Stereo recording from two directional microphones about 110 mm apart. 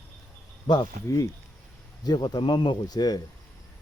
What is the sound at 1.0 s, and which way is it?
Speech, 25° left (ahead or behind).